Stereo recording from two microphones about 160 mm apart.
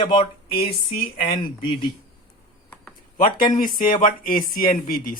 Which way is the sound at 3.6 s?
60° left (ahead or behind).